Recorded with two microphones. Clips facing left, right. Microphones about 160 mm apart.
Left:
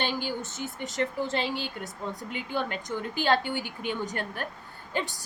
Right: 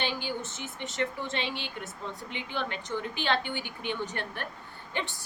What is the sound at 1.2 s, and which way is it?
A woman's voice, 35° left (ahead or behind).